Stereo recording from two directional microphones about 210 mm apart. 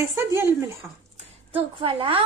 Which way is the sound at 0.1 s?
10° right (ahead or behind).